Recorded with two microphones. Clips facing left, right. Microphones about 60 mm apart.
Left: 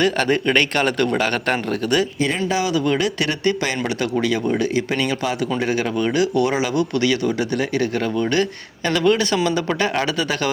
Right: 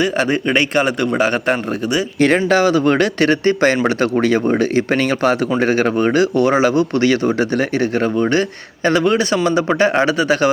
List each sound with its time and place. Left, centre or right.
0.0 s speech: centre
2.2 s speech: right
2.6 s speech: right